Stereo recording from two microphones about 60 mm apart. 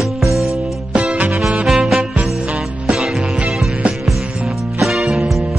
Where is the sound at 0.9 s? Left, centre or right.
Right.